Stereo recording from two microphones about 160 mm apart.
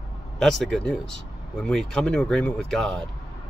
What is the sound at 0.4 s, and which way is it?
Speech, 5° left (ahead or behind).